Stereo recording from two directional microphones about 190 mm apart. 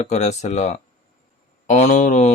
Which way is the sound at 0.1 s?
40° left (ahead or behind).